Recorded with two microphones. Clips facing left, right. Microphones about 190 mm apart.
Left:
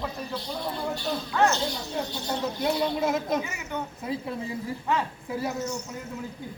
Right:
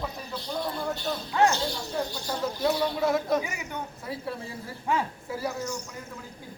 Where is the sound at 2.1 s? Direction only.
20° left (ahead or behind).